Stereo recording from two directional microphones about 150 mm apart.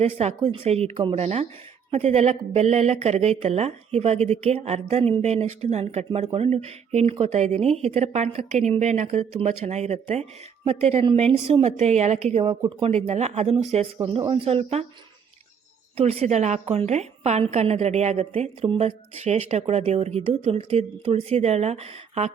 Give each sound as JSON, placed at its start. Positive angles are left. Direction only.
{"t": 0.0, "sound": "a woman's voice", "side_deg": -40}
{"t": 16.0, "sound": "a woman's voice", "side_deg": -40}